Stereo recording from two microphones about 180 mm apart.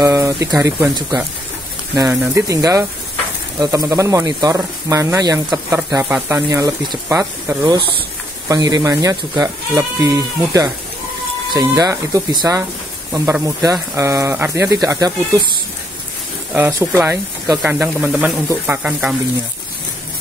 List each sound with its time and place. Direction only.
0.0 s speech: 15° right (ahead or behind)
2.3 s speech: 15° right (ahead or behind)
16.5 s speech: 10° right (ahead or behind)